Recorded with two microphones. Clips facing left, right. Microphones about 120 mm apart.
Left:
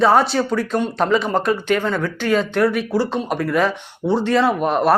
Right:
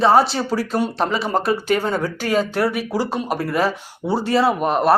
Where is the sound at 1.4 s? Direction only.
40° right (ahead or behind).